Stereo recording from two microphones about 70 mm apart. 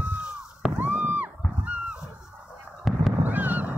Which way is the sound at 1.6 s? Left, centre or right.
Right.